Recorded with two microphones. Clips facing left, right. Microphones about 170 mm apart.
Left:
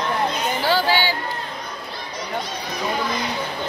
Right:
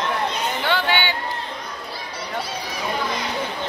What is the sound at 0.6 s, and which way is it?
Chatter, 35° left (ahead or behind).